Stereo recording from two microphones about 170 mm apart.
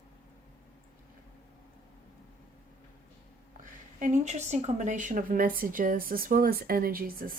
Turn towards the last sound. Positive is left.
turn(degrees=-60)  # may be behind; listen again after turning